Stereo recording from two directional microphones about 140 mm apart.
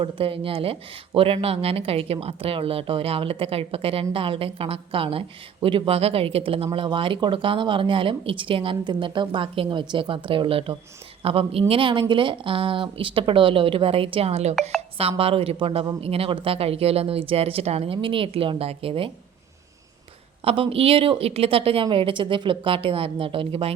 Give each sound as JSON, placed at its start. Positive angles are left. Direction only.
{"t": 0.0, "sound": "speech", "side_deg": -40}
{"t": 20.4, "sound": "speech", "side_deg": -45}